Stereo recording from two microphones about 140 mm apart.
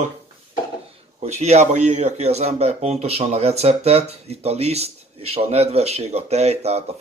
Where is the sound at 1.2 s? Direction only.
55° right (ahead or behind).